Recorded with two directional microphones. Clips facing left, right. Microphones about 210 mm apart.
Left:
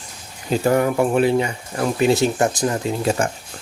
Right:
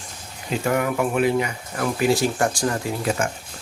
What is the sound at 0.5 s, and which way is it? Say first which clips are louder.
Speech: left 5 dB; 35° left (ahead or behind).